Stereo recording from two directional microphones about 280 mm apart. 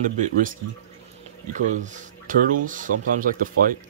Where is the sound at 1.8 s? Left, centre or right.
Right.